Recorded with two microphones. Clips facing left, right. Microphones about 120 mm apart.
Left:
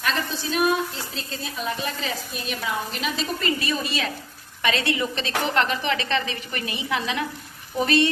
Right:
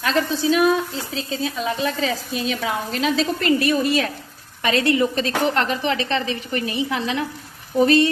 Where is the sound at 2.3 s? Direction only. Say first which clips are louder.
Right 5 dB; 90° right; by 3.7 s 70° right (ahead or behind).